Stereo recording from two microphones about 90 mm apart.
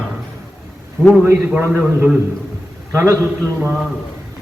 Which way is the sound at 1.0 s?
10° left (ahead or behind).